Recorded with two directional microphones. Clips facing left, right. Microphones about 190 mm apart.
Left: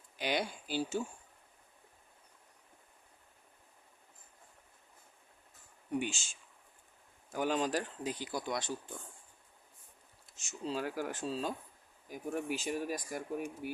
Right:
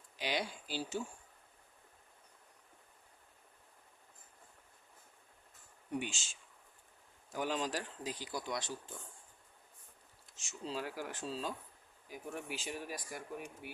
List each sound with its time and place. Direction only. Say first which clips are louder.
0.2 s speech: left 3 dB; 50° left (ahead or behind)
6.0 s speech: left 7 dB; 50° left (ahead or behind)
7.3 s speech: left 4 dB; 50° left (ahead or behind)
10.3 s speech: left 4 dB; 50° left (ahead or behind)